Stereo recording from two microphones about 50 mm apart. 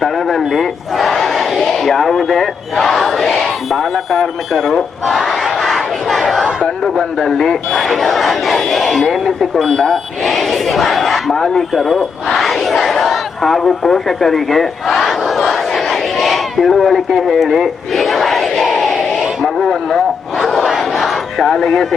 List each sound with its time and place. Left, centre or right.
0.0 s a sound: centre
5.0 s battle cry: centre
7.2 s speech: centre
11.7 s a sound: centre
20.7 s battle cry: centre
21.3 s speech: centre